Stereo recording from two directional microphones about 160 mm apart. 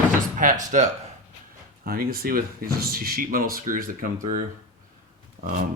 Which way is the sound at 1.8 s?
70° right (ahead or behind).